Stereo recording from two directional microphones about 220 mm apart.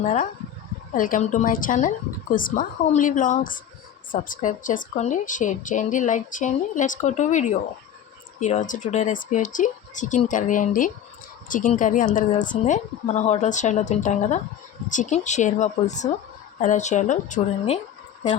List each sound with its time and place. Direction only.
0.0 s a woman's voice: 30° left (ahead or behind)